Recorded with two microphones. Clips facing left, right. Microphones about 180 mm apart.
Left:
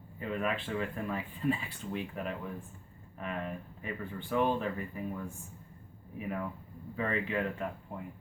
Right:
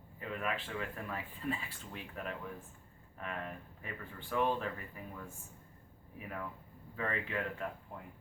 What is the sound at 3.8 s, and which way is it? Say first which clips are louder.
Speech: left 7 dB; 15° left (ahead or behind).